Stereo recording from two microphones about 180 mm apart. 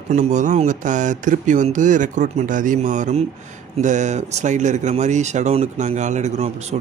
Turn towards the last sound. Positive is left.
turn(degrees=-40)  # may be behind; listen again after turning